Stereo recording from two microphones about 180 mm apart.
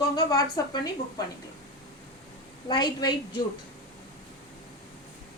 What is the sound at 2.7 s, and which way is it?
Speech, 25° left (ahead or behind).